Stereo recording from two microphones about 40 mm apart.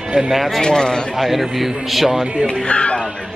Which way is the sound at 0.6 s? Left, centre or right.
Centre.